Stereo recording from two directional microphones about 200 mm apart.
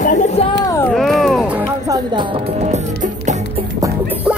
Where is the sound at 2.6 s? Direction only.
35° right (ahead or behind).